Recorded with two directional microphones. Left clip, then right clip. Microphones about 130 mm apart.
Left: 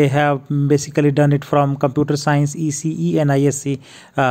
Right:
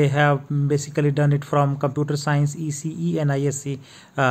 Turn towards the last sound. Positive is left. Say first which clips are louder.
# left 4 dB
turn(degrees=40)  # may be behind; listen again after turning